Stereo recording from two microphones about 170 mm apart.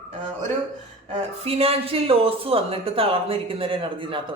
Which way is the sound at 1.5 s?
35° right (ahead or behind).